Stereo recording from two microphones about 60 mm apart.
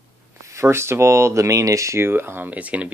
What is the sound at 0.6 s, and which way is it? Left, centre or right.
Speech, right.